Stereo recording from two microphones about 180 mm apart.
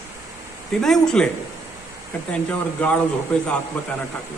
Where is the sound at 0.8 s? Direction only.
5° left (ahead or behind).